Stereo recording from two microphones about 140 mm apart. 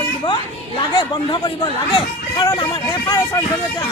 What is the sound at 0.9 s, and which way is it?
Speech, 35° left (ahead or behind).